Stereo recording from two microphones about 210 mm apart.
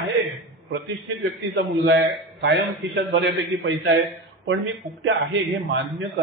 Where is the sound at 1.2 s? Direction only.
55° right (ahead or behind).